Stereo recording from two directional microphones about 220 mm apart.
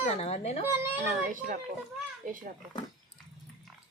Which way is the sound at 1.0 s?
40° right (ahead or behind).